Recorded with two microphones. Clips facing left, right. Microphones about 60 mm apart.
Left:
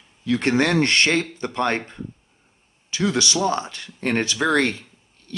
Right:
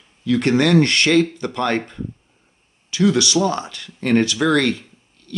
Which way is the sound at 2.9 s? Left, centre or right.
Left.